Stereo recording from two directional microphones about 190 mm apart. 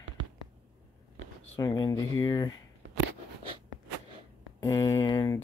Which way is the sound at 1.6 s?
25° left (ahead or behind).